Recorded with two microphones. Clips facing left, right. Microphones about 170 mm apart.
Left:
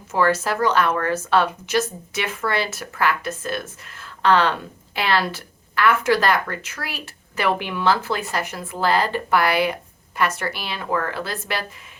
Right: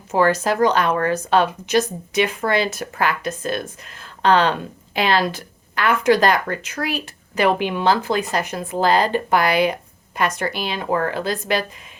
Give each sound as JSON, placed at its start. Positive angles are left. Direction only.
{"t": 0.3, "sound": "speech", "side_deg": -15}